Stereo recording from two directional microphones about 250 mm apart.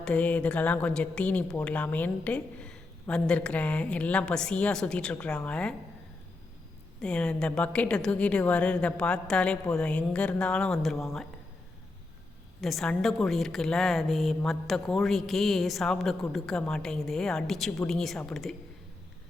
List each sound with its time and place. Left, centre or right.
0.0 s a woman's voice: centre
7.0 s a woman's voice: centre
12.6 s a woman's voice: centre